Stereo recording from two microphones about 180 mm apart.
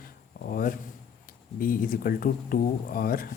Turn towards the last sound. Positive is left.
turn(degrees=55)  # may be behind; listen again after turning